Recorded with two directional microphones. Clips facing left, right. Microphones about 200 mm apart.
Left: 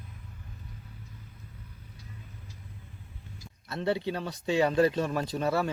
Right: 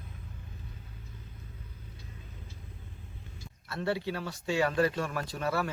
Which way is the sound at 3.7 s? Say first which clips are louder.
Left 3 dB; 20° left (ahead or behind).